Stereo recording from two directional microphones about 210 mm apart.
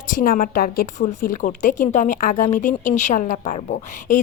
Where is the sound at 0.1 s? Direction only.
40° left (ahead or behind).